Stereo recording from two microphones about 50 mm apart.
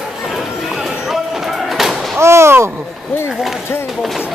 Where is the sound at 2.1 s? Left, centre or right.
Right.